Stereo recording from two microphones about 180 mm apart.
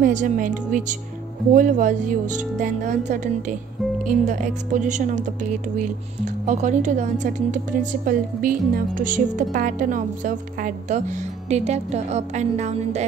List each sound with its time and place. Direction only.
0.0 s speech: 45° right (ahead or behind)